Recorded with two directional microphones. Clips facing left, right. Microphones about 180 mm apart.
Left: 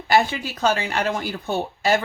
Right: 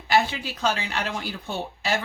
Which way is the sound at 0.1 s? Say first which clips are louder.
Left 3 dB; 50° left (ahead or behind).